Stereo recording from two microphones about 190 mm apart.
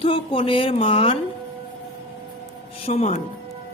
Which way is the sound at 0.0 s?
30° left (ahead or behind).